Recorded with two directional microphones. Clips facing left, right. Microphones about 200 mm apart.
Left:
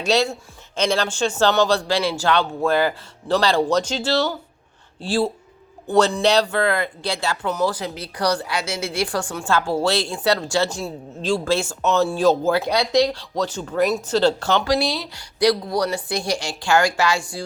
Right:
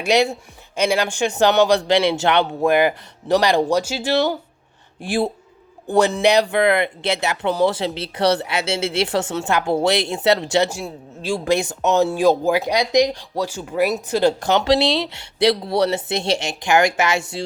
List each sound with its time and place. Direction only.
0.0 s speech: 15° right (ahead or behind)
10.7 s speech: 10° right (ahead or behind)